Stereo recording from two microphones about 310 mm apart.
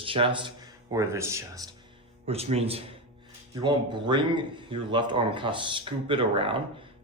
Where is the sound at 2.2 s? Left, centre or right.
Centre.